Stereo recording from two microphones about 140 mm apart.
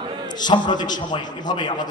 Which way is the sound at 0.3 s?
30° left (ahead or behind).